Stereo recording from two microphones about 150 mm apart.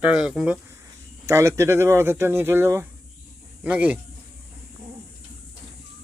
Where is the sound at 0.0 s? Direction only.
5° right (ahead or behind).